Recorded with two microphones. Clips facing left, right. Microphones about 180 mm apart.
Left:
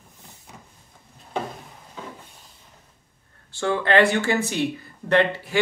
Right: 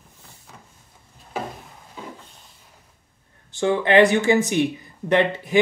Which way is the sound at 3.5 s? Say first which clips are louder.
Right 3 dB; 15° right (ahead or behind).